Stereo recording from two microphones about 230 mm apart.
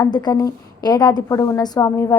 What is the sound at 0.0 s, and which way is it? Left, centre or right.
A woman's voice, centre.